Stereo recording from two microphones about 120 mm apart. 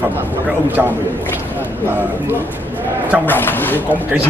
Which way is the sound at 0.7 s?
15° right (ahead or behind).